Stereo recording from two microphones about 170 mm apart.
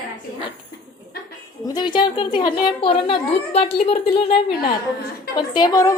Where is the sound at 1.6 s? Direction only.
25° left (ahead or behind).